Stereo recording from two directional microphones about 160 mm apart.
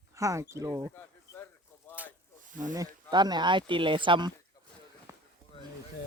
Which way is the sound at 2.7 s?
25° right (ahead or behind).